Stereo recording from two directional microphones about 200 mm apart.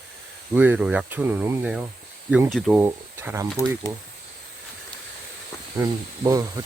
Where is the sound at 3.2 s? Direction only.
10° right (ahead or behind).